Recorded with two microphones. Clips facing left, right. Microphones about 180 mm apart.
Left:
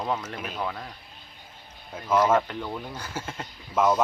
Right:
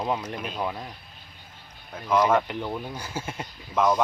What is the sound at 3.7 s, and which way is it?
Speech, 10° left (ahead or behind).